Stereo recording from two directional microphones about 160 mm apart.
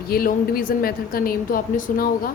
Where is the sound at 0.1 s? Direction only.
65° left (ahead or behind).